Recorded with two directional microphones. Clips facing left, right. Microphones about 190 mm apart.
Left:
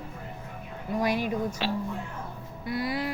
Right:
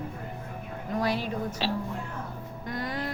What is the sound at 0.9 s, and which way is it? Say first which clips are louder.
Speech: left 2 dB; 15° left (ahead or behind).